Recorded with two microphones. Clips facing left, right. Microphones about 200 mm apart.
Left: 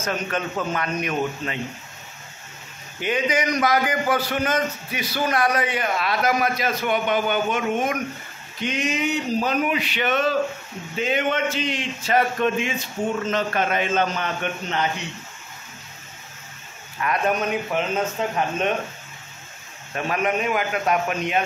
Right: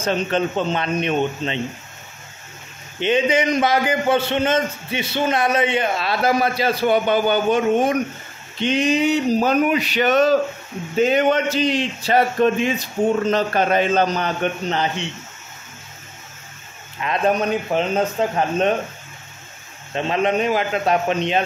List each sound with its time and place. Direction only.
0.0 s a man's voice: 30° right (ahead or behind)
3.0 s a man's voice: 25° right (ahead or behind)
17.0 s speech: 30° right (ahead or behind)
19.9 s a man's voice: 25° right (ahead or behind)